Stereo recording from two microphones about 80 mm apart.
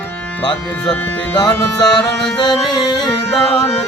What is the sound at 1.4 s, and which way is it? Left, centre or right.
Music, left.